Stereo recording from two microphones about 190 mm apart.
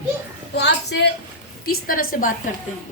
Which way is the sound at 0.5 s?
60° left (ahead or behind).